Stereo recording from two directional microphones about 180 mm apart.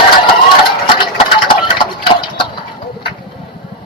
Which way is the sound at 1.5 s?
30° left (ahead or behind).